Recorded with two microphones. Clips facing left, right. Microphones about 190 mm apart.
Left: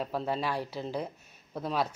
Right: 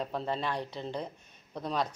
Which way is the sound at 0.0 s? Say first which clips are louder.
Left 2 dB; 5° left (ahead or behind).